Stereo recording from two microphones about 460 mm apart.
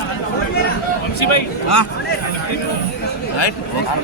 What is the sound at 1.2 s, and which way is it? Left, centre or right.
Speech, left.